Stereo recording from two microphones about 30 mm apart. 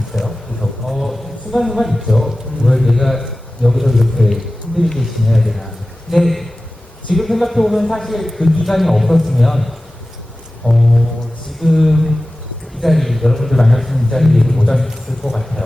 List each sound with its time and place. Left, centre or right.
0.1 s a sound: centre
5.3 s a man's voice: centre
10.6 s music: left
11.6 s a man's voice: centre